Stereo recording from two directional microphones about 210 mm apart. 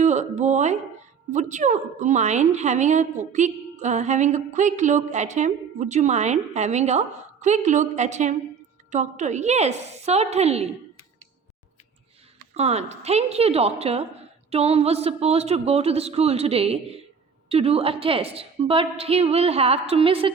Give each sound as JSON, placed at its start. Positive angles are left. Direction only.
{"t": 0.0, "sound": "a woman's voice", "side_deg": -35}
{"t": 12.5, "sound": "a woman's voice", "side_deg": -30}